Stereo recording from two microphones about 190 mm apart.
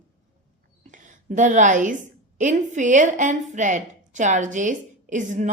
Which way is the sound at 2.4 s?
40° right (ahead or behind).